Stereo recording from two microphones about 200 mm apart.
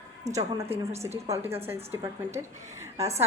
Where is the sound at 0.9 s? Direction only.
30° right (ahead or behind).